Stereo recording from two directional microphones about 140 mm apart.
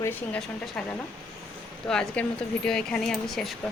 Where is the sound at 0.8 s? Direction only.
5° left (ahead or behind).